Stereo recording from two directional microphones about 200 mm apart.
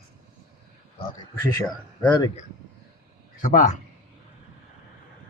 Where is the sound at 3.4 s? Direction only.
40° left (ahead or behind).